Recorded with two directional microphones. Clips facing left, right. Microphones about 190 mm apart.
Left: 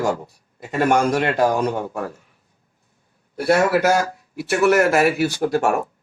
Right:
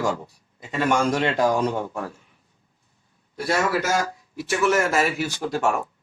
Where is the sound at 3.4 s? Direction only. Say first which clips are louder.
Left 7 dB; 55° left (ahead or behind).